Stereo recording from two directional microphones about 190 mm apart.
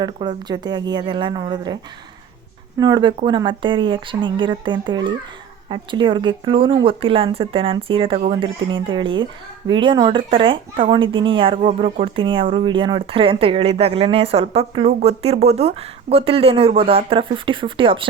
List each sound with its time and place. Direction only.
0.0 s speech: 20° right (ahead or behind)
2.7 s speech: 20° right (ahead or behind)